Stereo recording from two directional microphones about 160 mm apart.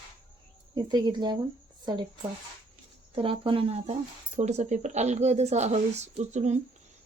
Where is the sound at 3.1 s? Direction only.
35° right (ahead or behind).